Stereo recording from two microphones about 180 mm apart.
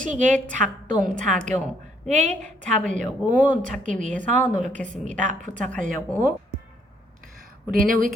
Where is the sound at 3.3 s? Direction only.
45° right (ahead or behind).